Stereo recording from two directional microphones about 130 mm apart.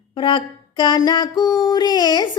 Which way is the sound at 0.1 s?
40° left (ahead or behind).